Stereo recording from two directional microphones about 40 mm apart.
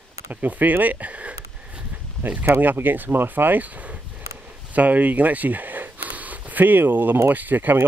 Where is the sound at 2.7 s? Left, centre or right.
Right.